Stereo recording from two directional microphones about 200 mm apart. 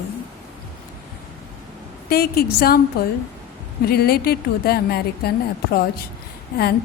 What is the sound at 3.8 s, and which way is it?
A woman's voice, 50° left (ahead or behind).